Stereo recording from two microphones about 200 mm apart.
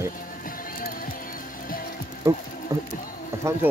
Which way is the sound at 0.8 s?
45° left (ahead or behind).